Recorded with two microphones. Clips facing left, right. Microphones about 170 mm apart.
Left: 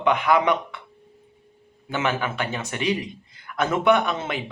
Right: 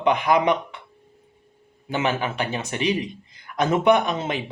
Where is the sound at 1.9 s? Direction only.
25° right (ahead or behind).